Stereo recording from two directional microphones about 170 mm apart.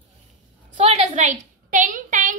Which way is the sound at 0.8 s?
40° right (ahead or behind).